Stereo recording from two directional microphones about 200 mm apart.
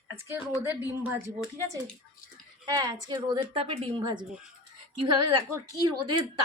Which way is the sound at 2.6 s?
20° right (ahead or behind).